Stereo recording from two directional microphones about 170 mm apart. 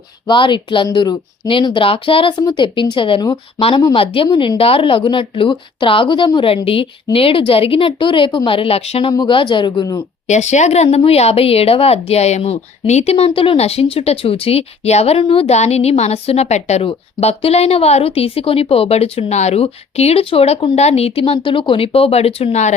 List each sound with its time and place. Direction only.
0.3 s a woman's voice: 30° left (ahead or behind)
10.2 s speech: 45° left (ahead or behind)